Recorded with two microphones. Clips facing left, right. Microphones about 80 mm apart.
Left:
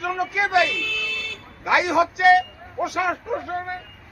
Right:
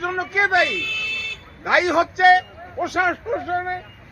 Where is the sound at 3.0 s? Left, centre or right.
Right.